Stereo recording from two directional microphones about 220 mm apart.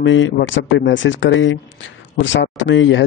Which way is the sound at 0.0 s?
60° left (ahead or behind).